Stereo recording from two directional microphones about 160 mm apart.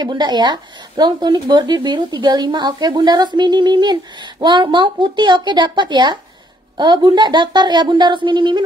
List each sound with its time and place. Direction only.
0.0 s a woman's voice: 30° right (ahead or behind)